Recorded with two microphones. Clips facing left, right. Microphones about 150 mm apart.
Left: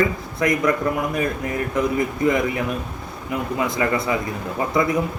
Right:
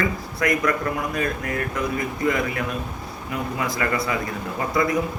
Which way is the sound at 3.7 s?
25° left (ahead or behind).